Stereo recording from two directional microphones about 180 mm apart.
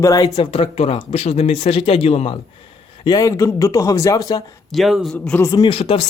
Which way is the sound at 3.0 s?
20° left (ahead or behind).